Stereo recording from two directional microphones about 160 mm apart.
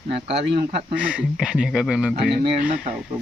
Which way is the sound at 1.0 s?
5° right (ahead or behind).